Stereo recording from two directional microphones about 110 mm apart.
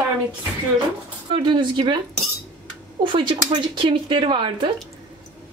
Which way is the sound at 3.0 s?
45° right (ahead or behind).